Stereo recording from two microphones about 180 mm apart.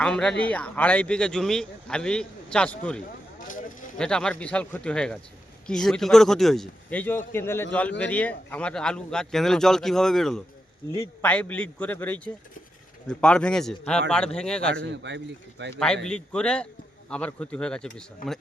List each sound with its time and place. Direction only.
0.0 s speech: 5° left (ahead or behind)
3.4 s a sound: 50° left (ahead or behind)
3.9 s a man's voice: 5° left (ahead or behind)
14.8 s a man's voice: 80° right
15.7 s speech: 5° left (ahead or behind)